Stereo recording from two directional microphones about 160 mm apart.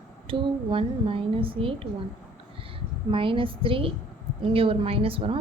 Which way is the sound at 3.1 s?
35° right (ahead or behind).